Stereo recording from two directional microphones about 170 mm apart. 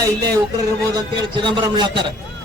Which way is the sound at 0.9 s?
25° right (ahead or behind).